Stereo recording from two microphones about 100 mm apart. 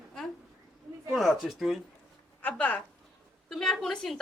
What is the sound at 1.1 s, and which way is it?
Speech, centre (ahead or behind).